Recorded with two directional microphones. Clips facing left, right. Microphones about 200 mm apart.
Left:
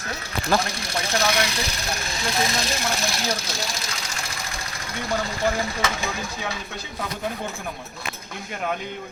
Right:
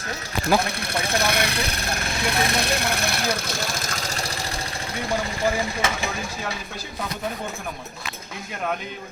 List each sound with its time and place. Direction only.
0.6 s speech: 60° right (ahead or behind)